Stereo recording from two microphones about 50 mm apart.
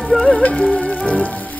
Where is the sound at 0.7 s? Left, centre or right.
Left.